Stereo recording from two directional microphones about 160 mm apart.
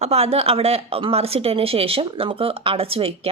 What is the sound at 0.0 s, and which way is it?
A woman's voice, 40° right (ahead or behind).